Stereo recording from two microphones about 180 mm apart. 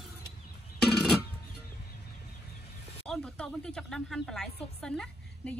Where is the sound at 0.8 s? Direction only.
Centre (ahead or behind).